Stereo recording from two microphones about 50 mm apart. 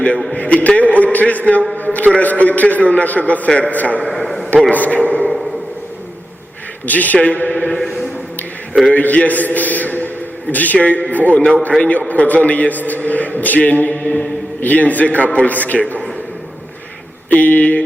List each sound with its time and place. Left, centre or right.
0.3 s a man's voice: left
4.1 s radio: centre
4.7 s a man's voice: left
6.8 s a man's voice: left
7.8 s a sound: centre
8.9 s a man's voice: left
11.3 s a man's voice: left
17.2 s a man's voice: left